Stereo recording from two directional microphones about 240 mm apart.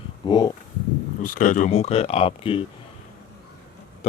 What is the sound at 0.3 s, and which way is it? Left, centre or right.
Speech, centre.